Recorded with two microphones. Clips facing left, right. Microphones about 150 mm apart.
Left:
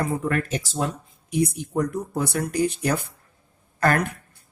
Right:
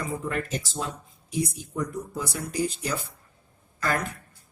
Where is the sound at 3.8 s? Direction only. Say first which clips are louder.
Left 6 dB; 60° left (ahead or behind).